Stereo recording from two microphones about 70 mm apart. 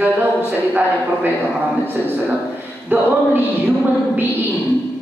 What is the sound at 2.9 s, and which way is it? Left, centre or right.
A man's voice, right.